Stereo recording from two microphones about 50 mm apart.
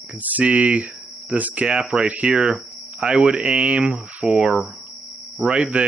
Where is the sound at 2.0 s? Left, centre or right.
Right.